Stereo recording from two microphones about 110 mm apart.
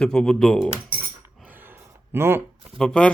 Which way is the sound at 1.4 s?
20° right (ahead or behind).